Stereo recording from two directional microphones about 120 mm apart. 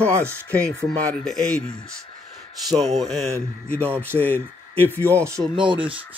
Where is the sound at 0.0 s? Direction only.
20° right (ahead or behind).